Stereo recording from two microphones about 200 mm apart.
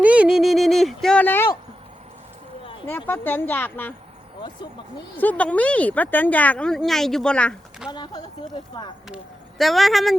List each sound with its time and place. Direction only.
0.0 s speech: 5° right (ahead or behind); by 1.5 s 10° left (ahead or behind)
3.1 s speech: 10° left (ahead or behind)
5.1 s speech: 10° left (ahead or behind)
7.9 s speech: 20° left (ahead or behind)
9.0 s speech: centre (ahead or behind)